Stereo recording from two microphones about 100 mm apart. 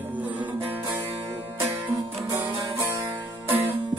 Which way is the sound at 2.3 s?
25° right (ahead or behind).